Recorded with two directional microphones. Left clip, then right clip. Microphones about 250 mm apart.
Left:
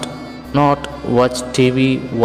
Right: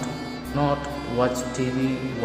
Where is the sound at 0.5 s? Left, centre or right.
Left.